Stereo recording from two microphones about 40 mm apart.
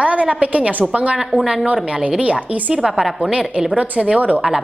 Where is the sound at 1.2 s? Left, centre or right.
Centre.